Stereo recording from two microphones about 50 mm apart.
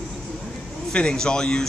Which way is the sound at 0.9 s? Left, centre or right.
Centre.